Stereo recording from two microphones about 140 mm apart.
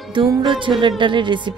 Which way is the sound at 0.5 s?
35° right (ahead or behind).